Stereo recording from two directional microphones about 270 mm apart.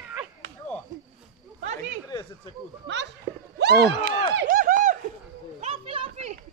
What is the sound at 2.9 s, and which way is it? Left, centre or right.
Speech, right.